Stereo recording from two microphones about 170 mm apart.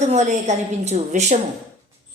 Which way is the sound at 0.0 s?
45° right (ahead or behind).